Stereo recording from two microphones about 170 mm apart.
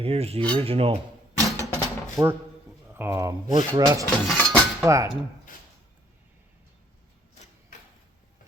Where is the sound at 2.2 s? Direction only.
15° right (ahead or behind).